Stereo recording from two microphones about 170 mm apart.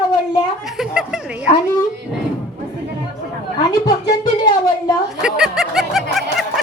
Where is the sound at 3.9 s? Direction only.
25° left (ahead or behind).